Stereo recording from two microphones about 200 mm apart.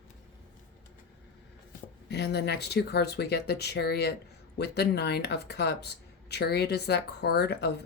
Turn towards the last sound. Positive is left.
turn(degrees=55)  # may be behind; listen again after turning